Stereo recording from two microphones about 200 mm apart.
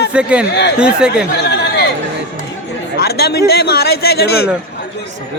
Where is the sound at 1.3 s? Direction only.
55° left (ahead or behind).